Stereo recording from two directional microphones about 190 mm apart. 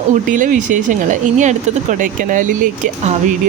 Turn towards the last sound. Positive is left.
turn(degrees=-45)  # may be behind; listen again after turning